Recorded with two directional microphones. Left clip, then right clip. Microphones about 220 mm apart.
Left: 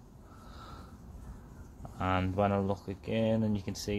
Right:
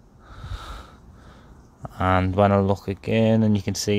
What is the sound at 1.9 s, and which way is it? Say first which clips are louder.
Speech: right 11 dB; 40° right (ahead or behind).